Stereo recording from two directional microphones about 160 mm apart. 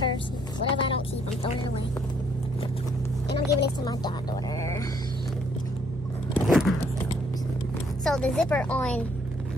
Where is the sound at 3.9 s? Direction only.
25° left (ahead or behind).